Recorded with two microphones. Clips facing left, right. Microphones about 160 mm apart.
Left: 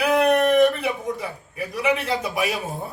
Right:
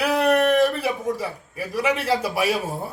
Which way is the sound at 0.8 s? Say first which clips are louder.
Right 2 dB; 30° right (ahead or behind).